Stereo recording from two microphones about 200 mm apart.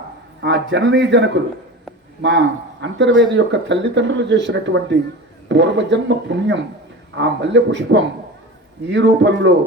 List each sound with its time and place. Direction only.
0.4 s speech: 65° right (ahead or behind)
2.8 s speech: 65° right (ahead or behind)